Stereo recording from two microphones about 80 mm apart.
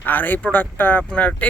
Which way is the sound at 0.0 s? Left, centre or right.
Left.